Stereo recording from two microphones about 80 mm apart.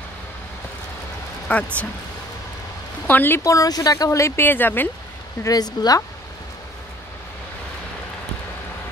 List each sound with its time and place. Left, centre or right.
1.5 s speech: centre
3.1 s speech: left
3.4 s speech: left
4.4 s speech: left
5.4 s speech: left